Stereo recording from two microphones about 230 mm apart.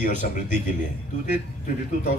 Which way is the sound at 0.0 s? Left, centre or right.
Left.